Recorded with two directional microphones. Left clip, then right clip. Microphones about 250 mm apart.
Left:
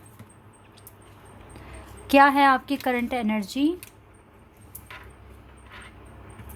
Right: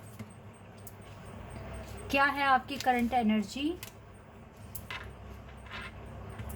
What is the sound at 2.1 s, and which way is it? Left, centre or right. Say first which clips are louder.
A woman's voice: left 10 dB; left.